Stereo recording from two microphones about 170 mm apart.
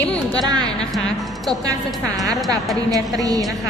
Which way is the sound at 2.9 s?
20° right (ahead or behind).